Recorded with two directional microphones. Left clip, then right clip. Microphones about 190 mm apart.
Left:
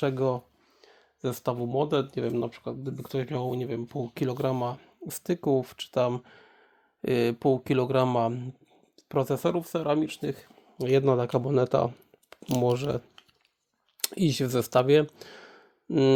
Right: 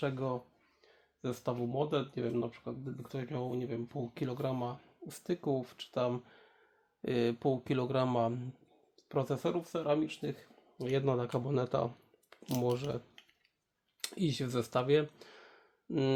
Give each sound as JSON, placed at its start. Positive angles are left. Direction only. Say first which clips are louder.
{"t": 0.0, "sound": "speech", "louder": "left 9 dB", "side_deg": 45}
{"t": 14.0, "sound": "speech", "louder": "left 9 dB", "side_deg": 40}